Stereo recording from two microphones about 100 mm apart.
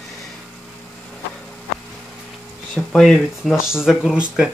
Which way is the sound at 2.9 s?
Centre (ahead or behind).